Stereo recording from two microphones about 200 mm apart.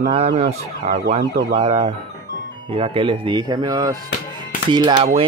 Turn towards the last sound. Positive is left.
turn(degrees=-25)  # may be behind; listen again after turning